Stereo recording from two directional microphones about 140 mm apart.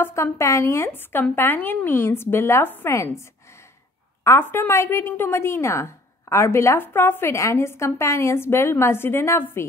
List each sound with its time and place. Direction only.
0.0 s a woman's voice: 20° left (ahead or behind)